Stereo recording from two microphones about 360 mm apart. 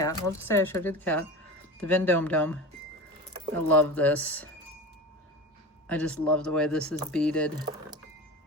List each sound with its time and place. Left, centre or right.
0.0 s speech: centre
3.7 s speech: centre
5.9 s speech: centre